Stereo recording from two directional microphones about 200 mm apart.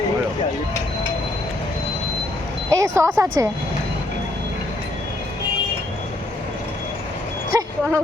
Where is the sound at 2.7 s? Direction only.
15° right (ahead or behind).